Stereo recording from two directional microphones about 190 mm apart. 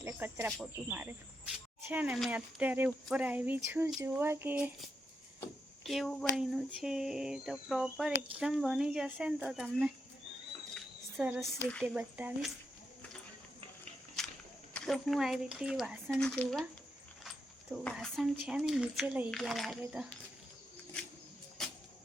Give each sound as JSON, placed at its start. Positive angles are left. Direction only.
{"t": 0.0, "sound": "speech", "side_deg": -10}
{"t": 5.8, "sound": "speech", "side_deg": 0}
{"t": 10.8, "sound": "a sound", "side_deg": -10}
{"t": 11.6, "sound": "speech", "side_deg": 5}
{"t": 11.9, "sound": "speech", "side_deg": -5}
{"t": 14.2, "sound": "walk", "side_deg": 5}
{"t": 14.7, "sound": "speech", "side_deg": 5}